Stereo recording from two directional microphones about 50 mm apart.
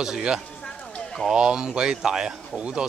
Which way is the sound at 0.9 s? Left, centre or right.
Centre.